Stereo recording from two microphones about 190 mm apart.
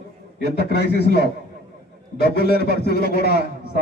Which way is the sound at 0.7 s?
60° left (ahead or behind).